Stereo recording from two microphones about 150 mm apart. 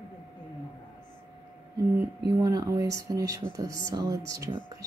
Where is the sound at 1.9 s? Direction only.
25° right (ahead or behind).